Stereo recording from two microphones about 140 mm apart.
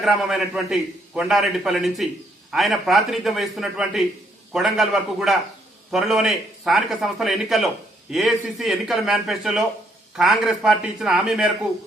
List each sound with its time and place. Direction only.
0.0 s a man's voice: centre (ahead or behind)